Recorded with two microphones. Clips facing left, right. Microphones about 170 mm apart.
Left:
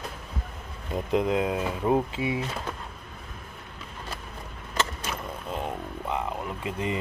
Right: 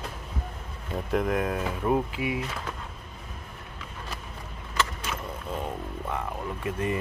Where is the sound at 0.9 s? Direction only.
20° left (ahead or behind).